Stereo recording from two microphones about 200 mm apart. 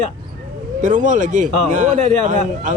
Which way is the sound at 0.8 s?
40° right (ahead or behind).